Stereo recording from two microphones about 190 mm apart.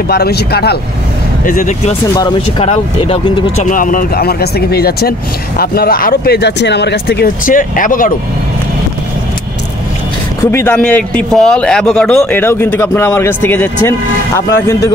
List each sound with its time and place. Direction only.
0.1 s speech: 55° left (ahead or behind)
1.4 s speech: 40° left (ahead or behind)
2.1 s speech: 30° left (ahead or behind); by 8.1 s 45° left (ahead or behind)
10.4 s speech: 15° left (ahead or behind)